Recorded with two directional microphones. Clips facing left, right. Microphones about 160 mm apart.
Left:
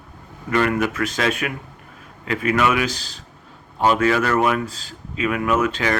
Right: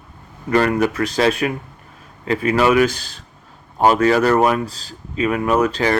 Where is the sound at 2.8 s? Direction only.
50° right (ahead or behind).